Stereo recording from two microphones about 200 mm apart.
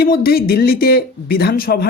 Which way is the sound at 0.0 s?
50° left (ahead or behind).